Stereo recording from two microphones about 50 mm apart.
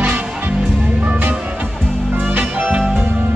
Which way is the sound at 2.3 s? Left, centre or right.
Right.